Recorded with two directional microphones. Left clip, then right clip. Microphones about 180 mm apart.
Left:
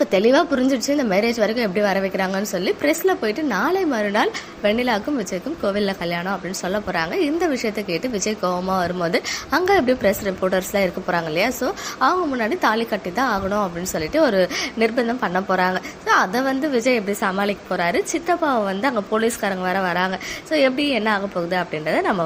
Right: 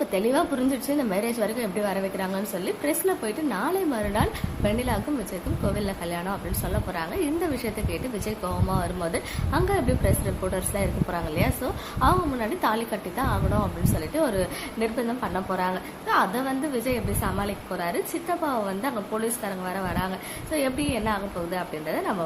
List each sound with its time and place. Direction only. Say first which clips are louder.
0.0 s a woman's voice: left 8 dB; 25° left (ahead or behind)